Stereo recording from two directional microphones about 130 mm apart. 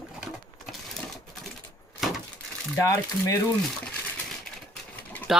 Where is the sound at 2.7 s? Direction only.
20° left (ahead or behind).